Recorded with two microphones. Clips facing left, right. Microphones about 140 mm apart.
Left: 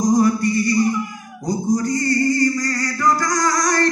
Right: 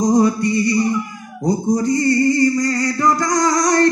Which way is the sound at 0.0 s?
20° right (ahead or behind).